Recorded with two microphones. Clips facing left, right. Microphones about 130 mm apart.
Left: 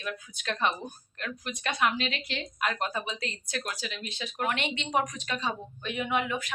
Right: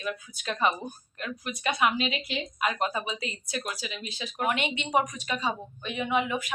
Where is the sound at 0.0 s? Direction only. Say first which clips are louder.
Right 2 dB; 5° right (ahead or behind).